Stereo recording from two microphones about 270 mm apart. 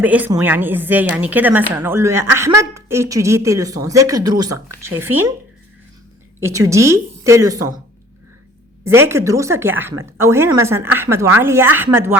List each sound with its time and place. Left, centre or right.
0.0 s a woman's voice: centre
6.4 s a woman's voice: centre
8.8 s a woman's voice: centre